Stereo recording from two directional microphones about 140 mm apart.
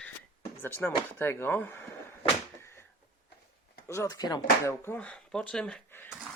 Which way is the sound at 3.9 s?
25° left (ahead or behind).